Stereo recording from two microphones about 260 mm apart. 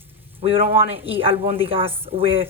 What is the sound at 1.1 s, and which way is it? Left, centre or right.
Speech, right.